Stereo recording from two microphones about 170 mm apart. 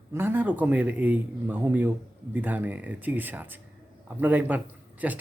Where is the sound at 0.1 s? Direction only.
15° right (ahead or behind).